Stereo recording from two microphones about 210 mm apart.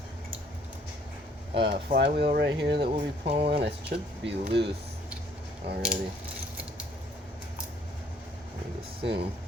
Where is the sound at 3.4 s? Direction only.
50° right (ahead or behind).